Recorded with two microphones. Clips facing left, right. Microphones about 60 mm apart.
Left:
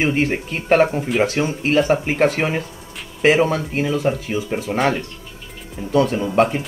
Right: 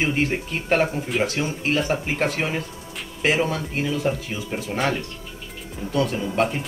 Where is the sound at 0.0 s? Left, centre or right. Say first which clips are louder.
Left 4 dB; left.